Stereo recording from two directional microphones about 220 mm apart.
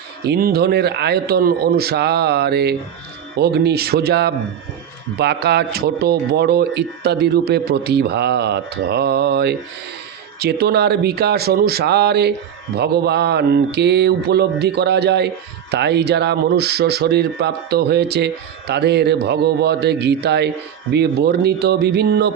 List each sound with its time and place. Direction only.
0.3 s speech: 45° right (ahead or behind)